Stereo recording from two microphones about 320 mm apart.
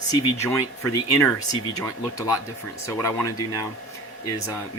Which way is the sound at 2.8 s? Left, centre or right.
Centre.